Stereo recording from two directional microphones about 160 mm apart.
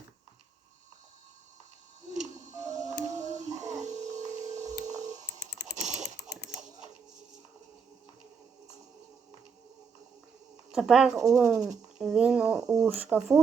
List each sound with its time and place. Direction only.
2.1 s music: 50° right (ahead or behind)
3.7 s a sound: 45° right (ahead or behind)
5.4 s computer keyboard: 90° left
10.7 s speech: 5° right (ahead or behind)